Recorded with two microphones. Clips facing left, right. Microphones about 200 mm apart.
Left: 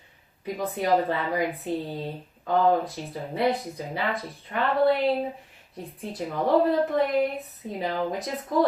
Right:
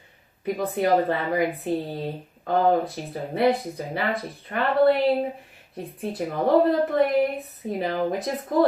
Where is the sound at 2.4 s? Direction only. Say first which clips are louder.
Right 1 dB; 50° right (ahead or behind).